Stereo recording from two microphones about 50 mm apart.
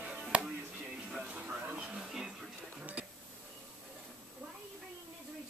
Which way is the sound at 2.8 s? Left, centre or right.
Right.